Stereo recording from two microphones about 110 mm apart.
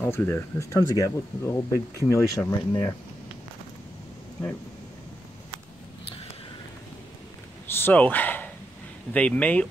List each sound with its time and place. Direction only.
0.1 s speech: 20° left (ahead or behind)
7.7 s a sound: 15° left (ahead or behind)
9.1 s speech: 10° left (ahead or behind)